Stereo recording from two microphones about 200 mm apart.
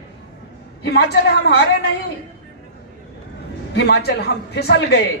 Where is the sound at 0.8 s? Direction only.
55° left (ahead or behind).